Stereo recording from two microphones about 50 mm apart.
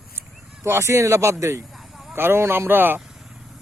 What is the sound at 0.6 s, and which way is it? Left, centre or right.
Speech, right.